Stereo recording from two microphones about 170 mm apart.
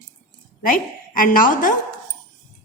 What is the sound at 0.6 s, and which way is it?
A woman's voice, 55° left (ahead or behind).